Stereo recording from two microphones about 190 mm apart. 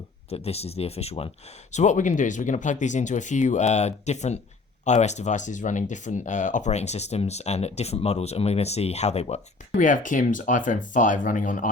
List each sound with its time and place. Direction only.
0.3 s speech: 30° left (ahead or behind)